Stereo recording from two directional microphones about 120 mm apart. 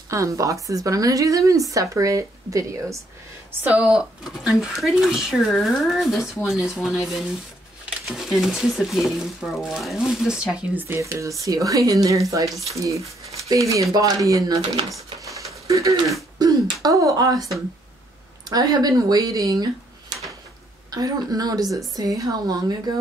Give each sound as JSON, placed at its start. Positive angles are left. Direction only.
{"t": 0.1, "sound": "speech", "side_deg": -25}
{"t": 3.6, "sound": "speech", "side_deg": -10}
{"t": 8.1, "sound": "speech", "side_deg": 0}
{"t": 10.9, "sound": "speech", "side_deg": -25}
{"t": 15.1, "sound": "a sound", "side_deg": -25}
{"t": 16.3, "sound": "speech", "side_deg": -30}
{"t": 18.5, "sound": "a woman's voice", "side_deg": -35}
{"t": 20.9, "sound": "a woman's voice", "side_deg": -30}